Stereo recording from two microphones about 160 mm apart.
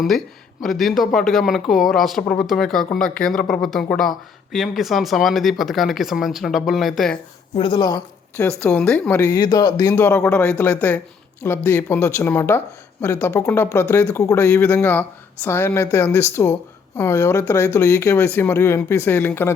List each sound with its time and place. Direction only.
0.6 s speech: centre (ahead or behind)
7.5 s speech: 30° left (ahead or behind)
8.4 s speech: 5° left (ahead or behind)